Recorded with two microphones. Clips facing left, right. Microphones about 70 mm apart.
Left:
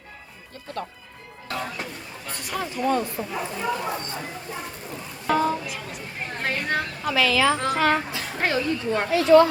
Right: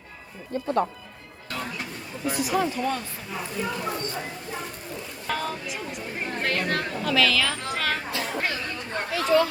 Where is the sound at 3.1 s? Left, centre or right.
Left.